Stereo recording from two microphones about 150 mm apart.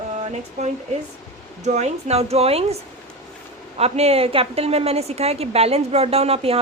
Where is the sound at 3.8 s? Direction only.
45° right (ahead or behind).